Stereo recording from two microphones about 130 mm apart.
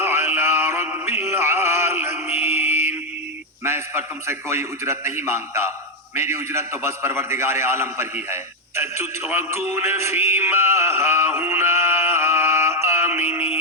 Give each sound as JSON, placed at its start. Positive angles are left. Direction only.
{"t": 0.0, "sound": "music", "side_deg": -15}
{"t": 2.1, "sound": "mantra", "side_deg": -15}
{"t": 3.6, "sound": "a man's voice", "side_deg": -20}